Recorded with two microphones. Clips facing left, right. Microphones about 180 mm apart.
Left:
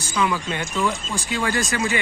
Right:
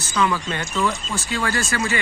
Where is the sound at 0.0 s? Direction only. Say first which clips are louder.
Right 1 dB; 15° left (ahead or behind).